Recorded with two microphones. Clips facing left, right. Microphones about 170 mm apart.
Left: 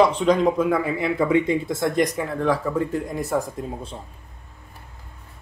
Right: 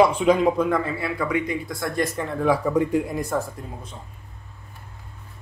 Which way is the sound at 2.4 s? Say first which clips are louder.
Right 2 dB; 10° right (ahead or behind).